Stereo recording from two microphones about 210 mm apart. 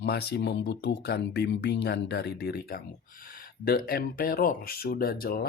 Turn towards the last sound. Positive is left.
turn(degrees=45)  # may be behind; listen again after turning